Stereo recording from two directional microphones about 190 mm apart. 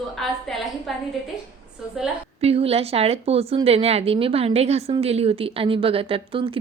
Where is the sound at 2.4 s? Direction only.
30° right (ahead or behind).